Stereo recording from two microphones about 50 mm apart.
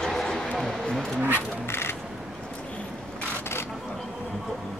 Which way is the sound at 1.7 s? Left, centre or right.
Left.